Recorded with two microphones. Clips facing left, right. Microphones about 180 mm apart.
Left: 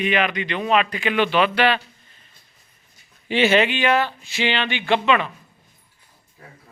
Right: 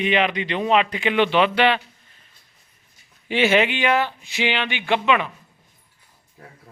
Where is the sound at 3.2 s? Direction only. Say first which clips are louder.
Left 1 dB; 10° right (ahead or behind).